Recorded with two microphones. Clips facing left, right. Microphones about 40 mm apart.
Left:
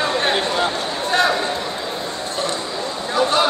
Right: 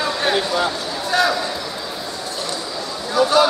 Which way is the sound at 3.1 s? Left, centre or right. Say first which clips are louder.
Right 3 dB; left.